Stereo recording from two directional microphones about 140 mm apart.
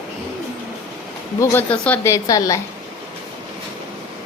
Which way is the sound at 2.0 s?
25° left (ahead or behind).